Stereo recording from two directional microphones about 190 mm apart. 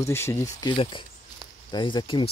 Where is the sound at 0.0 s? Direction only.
15° left (ahead or behind).